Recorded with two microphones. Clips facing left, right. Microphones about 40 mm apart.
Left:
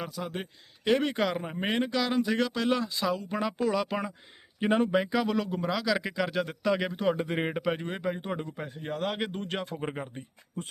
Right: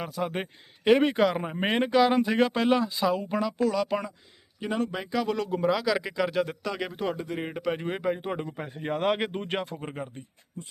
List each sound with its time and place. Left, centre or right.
0.0 s speech: centre
1.1 s speech: centre
1.5 s speech: right
2.6 s speech: centre
3.6 s speech: centre
4.6 s speech: left
4.9 s speech: centre
7.2 s speech: left
7.5 s speech: centre
7.8 s speech: centre
8.9 s speech: right
9.6 s speech: centre